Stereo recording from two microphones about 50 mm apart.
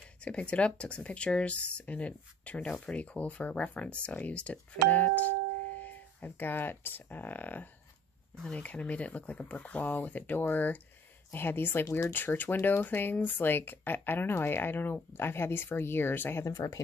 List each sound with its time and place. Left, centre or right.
0.2 s speech: left
8.5 s speech: left